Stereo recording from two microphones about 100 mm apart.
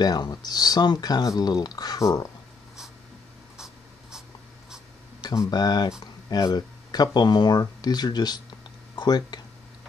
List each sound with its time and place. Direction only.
0.0 s speech: 45° left (ahead or behind)
3.5 s writing: 5° right (ahead or behind)
5.5 s speech: 40° left (ahead or behind)